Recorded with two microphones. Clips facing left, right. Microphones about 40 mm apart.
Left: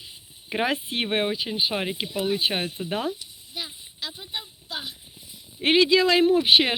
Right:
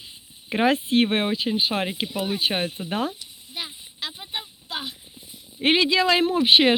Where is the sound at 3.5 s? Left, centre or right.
Centre.